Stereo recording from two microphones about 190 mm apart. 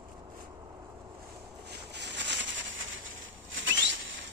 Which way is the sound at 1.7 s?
65° right (ahead or behind).